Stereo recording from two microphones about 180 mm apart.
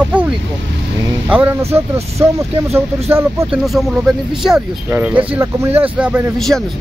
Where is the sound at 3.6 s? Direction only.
Centre (ahead or behind).